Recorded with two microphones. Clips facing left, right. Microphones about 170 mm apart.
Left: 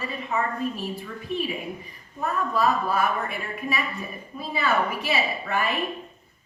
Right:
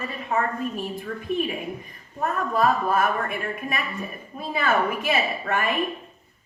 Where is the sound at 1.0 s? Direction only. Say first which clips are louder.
Right 5 dB; 50° right (ahead or behind).